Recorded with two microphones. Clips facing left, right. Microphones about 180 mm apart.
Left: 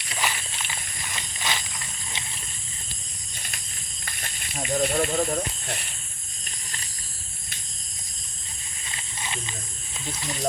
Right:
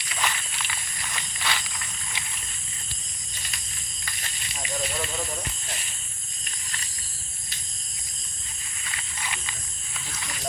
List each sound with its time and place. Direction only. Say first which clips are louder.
0.2 s a sound: even; 20° left (ahead or behind)
4.0 s snake: left 2 dB; 50° left (ahead or behind)
8.8 s wild animals: even; 25° left (ahead or behind)